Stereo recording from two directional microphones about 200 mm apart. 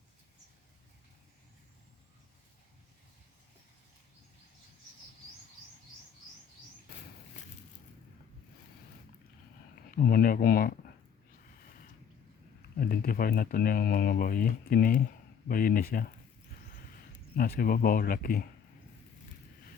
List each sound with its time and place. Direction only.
9.9 s speech: 45° left (ahead or behind)
12.8 s speech: 50° left (ahead or behind)
17.1 s speech: 50° left (ahead or behind)